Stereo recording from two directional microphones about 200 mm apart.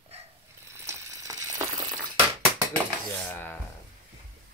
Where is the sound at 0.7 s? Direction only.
15° right (ahead or behind).